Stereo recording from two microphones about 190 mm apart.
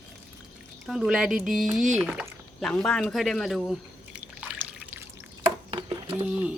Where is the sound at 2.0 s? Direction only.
5° right (ahead or behind).